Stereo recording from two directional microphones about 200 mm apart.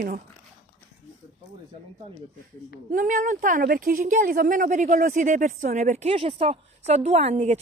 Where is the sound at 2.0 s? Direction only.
30° right (ahead or behind).